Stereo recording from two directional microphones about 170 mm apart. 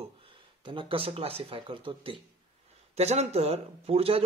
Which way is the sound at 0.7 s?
30° right (ahead or behind).